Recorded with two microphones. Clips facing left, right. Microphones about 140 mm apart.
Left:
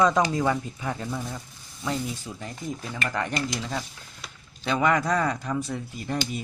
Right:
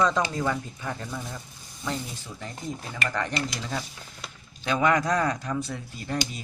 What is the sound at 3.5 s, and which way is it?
Speech, centre (ahead or behind).